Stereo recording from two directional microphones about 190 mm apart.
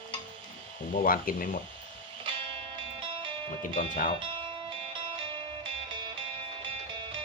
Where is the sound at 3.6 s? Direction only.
45° left (ahead or behind).